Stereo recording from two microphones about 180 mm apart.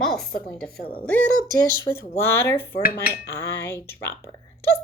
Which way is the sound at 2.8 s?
55° left (ahead or behind).